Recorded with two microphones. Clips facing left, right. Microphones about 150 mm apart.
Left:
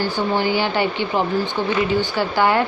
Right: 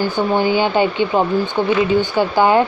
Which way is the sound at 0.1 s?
20° right (ahead or behind).